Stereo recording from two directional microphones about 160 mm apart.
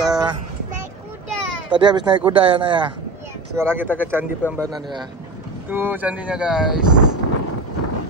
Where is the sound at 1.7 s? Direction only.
30° right (ahead or behind).